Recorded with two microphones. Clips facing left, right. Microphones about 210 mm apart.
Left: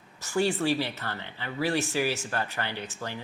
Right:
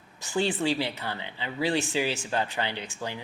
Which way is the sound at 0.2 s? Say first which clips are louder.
Left 1 dB; 20° right (ahead or behind).